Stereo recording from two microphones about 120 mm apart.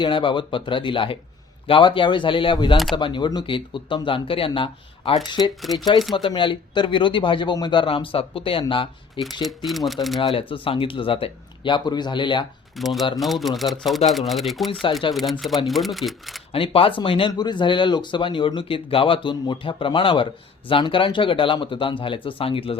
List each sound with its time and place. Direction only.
0.0 s speech: 45° left (ahead or behind)
9.4 s speech: centre (ahead or behind)
10.2 s speech: 50° left (ahead or behind)
12.7 s speech: centre (ahead or behind)
14.7 s speech: 45° left (ahead or behind)
15.1 s speech: centre (ahead or behind)
16.5 s speech: 50° left (ahead or behind)